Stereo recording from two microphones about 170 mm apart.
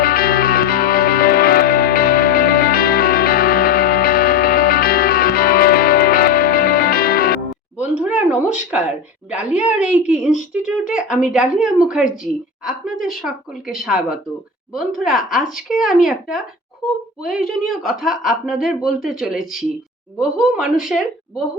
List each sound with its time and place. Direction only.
0.0 s music: 60° left (ahead or behind)
7.8 s a sound: 10° right (ahead or behind)
9.3 s a woman's voice: 5° right (ahead or behind)